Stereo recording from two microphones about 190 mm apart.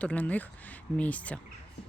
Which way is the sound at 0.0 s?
5° left (ahead or behind).